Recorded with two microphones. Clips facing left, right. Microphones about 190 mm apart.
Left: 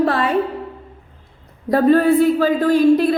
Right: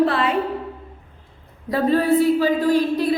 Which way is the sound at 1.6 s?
50° left (ahead or behind).